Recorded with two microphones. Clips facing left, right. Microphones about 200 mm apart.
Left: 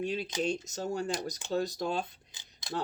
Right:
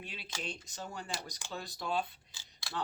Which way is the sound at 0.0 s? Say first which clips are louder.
Left 13 dB; 45° left (ahead or behind).